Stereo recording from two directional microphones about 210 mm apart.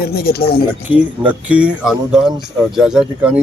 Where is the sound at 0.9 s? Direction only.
5° right (ahead or behind).